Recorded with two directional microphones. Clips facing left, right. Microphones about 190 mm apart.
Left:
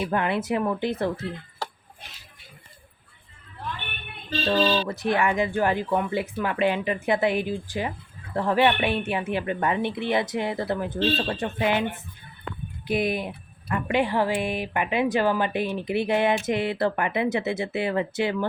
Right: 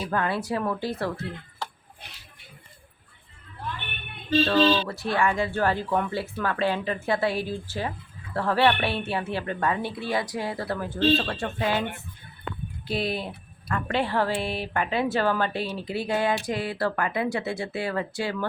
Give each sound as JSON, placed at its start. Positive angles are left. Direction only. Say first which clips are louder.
{"t": 0.1, "sound": "speech", "louder": "left 2 dB", "side_deg": 20}
{"t": 4.4, "sound": "speech", "louder": "left 2 dB", "side_deg": 20}
{"t": 12.9, "sound": "speech", "louder": "left 3 dB", "side_deg": 15}